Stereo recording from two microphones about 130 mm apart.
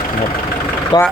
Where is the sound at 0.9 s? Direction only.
35° left (ahead or behind).